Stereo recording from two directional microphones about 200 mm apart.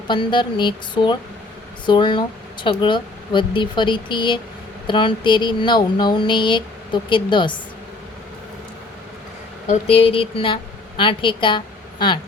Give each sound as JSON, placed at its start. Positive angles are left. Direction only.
{"t": 0.1, "sound": "speech", "side_deg": 25}
{"t": 9.6, "sound": "a woman's voice", "side_deg": 30}